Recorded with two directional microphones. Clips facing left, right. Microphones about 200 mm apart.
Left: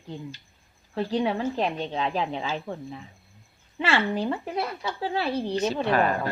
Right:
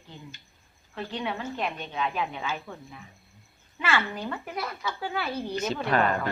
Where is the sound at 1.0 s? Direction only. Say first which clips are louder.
Left 7 dB; 35° left (ahead or behind).